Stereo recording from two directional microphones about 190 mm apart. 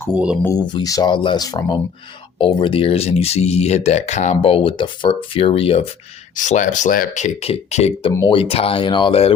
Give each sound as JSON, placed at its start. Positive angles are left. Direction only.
{"t": 0.1, "sound": "speech", "side_deg": -5}
{"t": 0.4, "sound": "speech", "side_deg": 20}
{"t": 6.3, "sound": "speech", "side_deg": 40}